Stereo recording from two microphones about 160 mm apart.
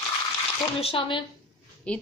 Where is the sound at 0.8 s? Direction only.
35° left (ahead or behind).